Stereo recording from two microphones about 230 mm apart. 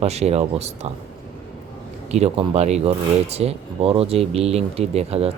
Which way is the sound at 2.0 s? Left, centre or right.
Right.